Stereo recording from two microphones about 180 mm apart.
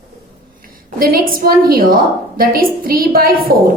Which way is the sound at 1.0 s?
55° right (ahead or behind).